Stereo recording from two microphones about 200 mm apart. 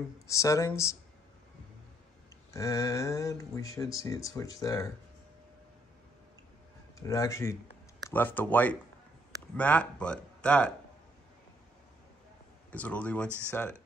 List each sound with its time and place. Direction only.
0.3 s speech: 15° left (ahead or behind)
2.5 s speech: 15° left (ahead or behind)
7.0 s speech: 15° left (ahead or behind)
12.7 s speech: 5° left (ahead or behind)